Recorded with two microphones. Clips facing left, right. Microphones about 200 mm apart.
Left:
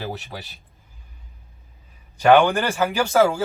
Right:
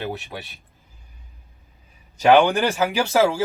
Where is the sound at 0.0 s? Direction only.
Centre (ahead or behind).